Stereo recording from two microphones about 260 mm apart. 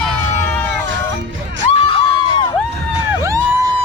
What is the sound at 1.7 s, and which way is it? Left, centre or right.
Crowd, left.